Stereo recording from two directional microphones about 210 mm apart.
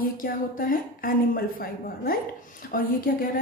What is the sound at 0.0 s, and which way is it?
A woman's voice, 40° left (ahead or behind).